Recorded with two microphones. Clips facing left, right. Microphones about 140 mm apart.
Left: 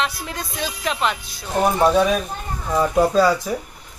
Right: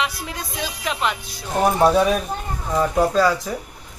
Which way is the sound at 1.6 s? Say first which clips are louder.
Even; 5° right (ahead or behind).